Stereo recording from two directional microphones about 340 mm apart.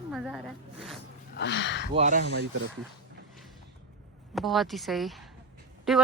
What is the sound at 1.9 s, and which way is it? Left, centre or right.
Speech, right.